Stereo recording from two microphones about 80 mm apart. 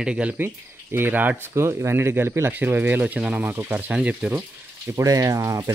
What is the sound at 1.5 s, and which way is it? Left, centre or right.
Speech, right.